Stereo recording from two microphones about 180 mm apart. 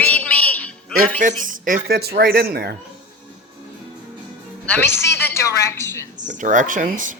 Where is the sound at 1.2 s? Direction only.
50° right (ahead or behind).